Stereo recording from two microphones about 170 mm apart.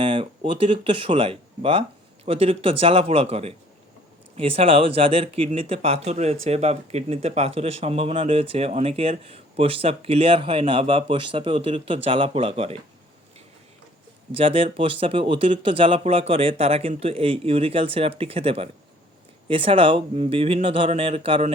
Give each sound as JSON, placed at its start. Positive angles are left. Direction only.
{"t": 0.0, "sound": "speech", "side_deg": -30}
{"t": 14.3, "sound": "speech", "side_deg": -35}